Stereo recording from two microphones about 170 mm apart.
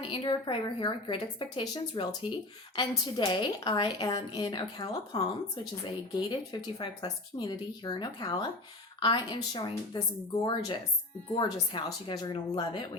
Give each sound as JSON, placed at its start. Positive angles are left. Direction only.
{"t": 0.0, "sound": "a woman's voice", "side_deg": 30}